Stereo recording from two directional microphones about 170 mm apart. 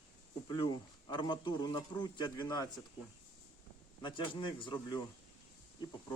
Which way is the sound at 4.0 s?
30° left (ahead or behind).